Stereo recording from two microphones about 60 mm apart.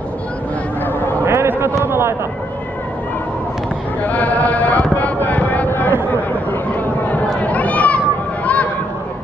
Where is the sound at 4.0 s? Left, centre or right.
Left.